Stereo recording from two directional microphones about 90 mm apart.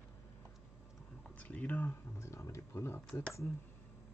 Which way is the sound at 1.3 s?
15° left (ahead or behind).